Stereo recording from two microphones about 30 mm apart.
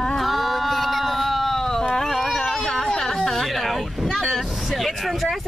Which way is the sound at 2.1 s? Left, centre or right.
Centre.